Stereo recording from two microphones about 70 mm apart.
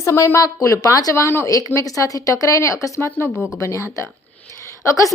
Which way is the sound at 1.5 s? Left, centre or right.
Left.